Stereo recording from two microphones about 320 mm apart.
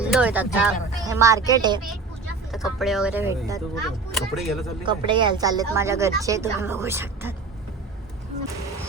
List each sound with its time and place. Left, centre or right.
0.0 s speech: centre
2.5 s speech: centre
4.8 s speech: centre